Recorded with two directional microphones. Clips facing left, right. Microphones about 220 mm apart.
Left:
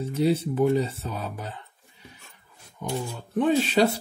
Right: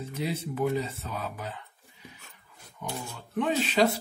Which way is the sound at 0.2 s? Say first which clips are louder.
Left 7 dB; 30° left (ahead or behind).